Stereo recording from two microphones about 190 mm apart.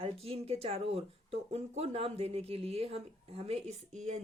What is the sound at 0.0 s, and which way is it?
Speech, 30° right (ahead or behind).